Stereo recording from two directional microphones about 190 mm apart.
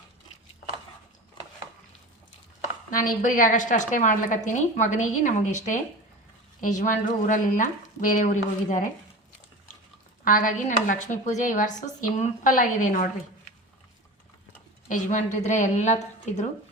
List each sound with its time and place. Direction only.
2.9 s speech: 45° left (ahead or behind)
6.6 s speech: 45° left (ahead or behind)
10.2 s speech: 45° left (ahead or behind)
14.8 s a woman's voice: 40° left (ahead or behind)